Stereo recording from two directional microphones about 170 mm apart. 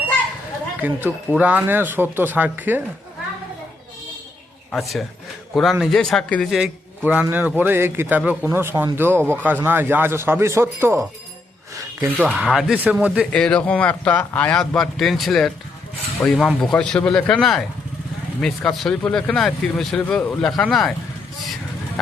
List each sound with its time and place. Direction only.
0.8 s a man's voice: 10° right (ahead or behind)
4.7 s a man's voice: centre (ahead or behind); by 11.0 s 15° right (ahead or behind)
11.8 s a sound: 15° right (ahead or behind)
12.3 s a man's voice: centre (ahead or behind)
13.3 s speech: 5° left (ahead or behind)